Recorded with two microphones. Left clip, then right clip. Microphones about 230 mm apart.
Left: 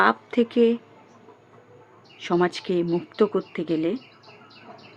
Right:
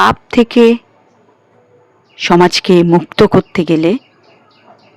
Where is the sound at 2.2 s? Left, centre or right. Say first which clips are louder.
Right 14 dB; right.